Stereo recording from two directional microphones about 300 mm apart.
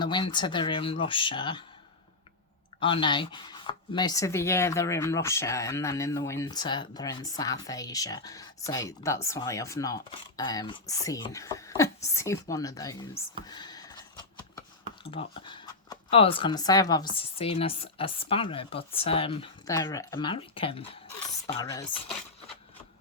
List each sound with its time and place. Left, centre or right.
0.0 s speech: centre
2.8 s speech: centre